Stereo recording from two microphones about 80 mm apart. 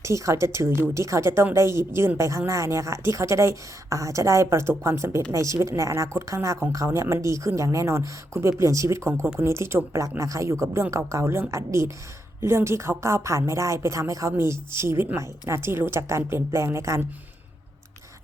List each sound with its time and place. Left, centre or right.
0.0 s speech: right